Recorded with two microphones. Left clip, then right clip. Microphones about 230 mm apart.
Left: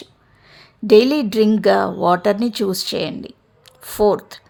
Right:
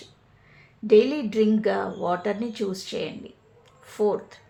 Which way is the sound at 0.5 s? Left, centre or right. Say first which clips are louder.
Left 6 dB; left.